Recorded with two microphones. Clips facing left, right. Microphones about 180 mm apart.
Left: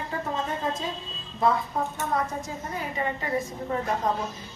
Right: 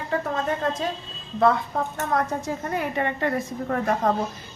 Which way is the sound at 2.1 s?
65° right (ahead or behind).